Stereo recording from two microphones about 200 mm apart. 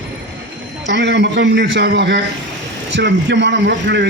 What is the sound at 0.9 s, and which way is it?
A man's voice, 60° right (ahead or behind).